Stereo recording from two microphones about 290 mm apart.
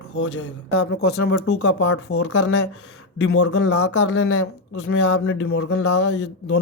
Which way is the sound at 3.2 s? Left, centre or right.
Left.